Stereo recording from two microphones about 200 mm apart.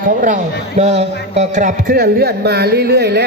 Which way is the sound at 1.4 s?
40° right (ahead or behind).